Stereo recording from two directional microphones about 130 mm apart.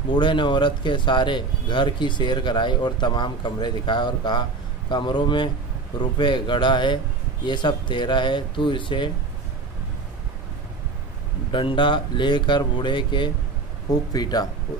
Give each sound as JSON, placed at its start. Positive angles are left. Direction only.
{"t": 0.1, "sound": "speech", "side_deg": 35}
{"t": 11.5, "sound": "speech", "side_deg": 40}